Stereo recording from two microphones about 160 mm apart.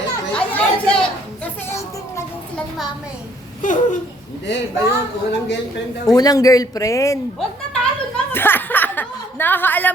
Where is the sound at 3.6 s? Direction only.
50° left (ahead or behind).